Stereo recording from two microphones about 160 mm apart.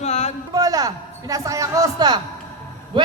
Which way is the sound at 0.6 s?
20° right (ahead or behind).